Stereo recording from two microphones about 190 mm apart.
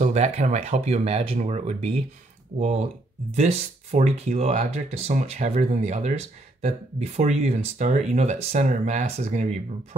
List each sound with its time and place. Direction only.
0.0 s speech: 35° right (ahead or behind)